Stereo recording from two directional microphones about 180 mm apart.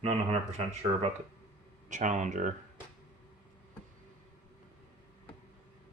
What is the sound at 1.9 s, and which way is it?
Speech, 45° right (ahead or behind).